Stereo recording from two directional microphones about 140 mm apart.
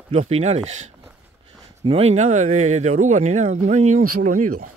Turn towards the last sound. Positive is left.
turn(degrees=-70)  # may be behind; listen again after turning